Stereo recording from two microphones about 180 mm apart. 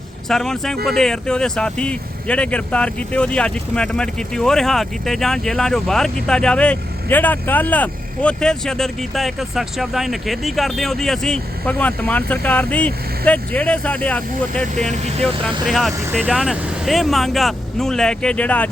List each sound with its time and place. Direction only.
0.3 s speech: centre (ahead or behind)